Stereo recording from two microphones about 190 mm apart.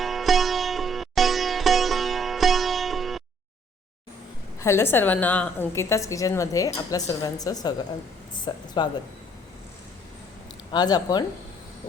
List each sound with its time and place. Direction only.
0.0 s sitar: centre (ahead or behind)
4.6 s a woman's voice: 15° left (ahead or behind)
10.7 s speech: 20° left (ahead or behind)